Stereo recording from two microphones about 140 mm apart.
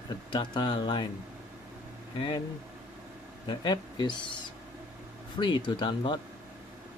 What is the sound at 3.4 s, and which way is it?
Speech, 30° left (ahead or behind).